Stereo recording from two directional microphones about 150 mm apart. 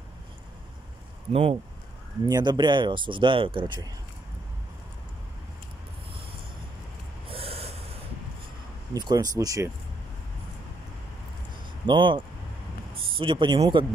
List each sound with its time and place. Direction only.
1.3 s speech: 40° right (ahead or behind)
2.2 s speech: 30° right (ahead or behind)
7.2 s snort: 40° right (ahead or behind)
8.9 s speech: 25° right (ahead or behind)
11.8 s speech: 30° right (ahead or behind)
13.2 s speech: 35° right (ahead or behind)